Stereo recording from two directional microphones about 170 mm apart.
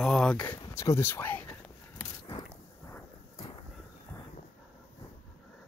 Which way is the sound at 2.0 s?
30° left (ahead or behind).